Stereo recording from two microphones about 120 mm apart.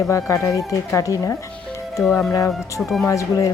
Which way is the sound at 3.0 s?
25° left (ahead or behind).